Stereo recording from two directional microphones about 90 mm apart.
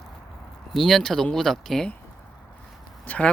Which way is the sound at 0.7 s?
5° left (ahead or behind).